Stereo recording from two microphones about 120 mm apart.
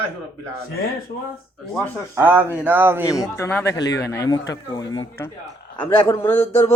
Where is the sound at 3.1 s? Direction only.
25° left (ahead or behind).